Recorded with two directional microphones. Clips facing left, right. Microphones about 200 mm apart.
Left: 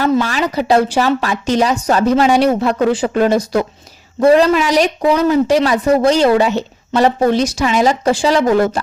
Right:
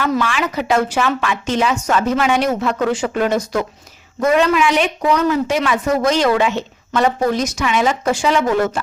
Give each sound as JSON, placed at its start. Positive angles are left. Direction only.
{"t": 0.0, "sound": "speech", "side_deg": 35}